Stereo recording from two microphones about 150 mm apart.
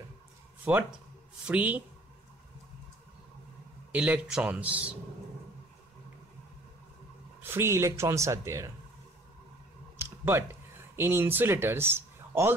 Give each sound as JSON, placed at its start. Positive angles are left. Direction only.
{"t": 0.7, "sound": "a man's voice", "side_deg": -10}
{"t": 3.9, "sound": "a man's voice", "side_deg": -10}
{"t": 7.4, "sound": "speech", "side_deg": -15}
{"t": 9.9, "sound": "a sound", "side_deg": -15}